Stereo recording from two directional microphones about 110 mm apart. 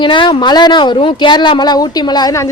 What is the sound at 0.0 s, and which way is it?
Speech, 45° left (ahead or behind).